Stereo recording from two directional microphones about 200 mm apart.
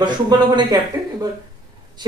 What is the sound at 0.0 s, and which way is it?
Speech, 20° right (ahead or behind).